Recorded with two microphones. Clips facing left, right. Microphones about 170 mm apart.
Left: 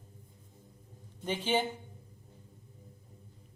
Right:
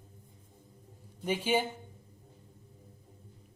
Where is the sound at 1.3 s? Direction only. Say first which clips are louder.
Right 2 dB; 10° right (ahead or behind).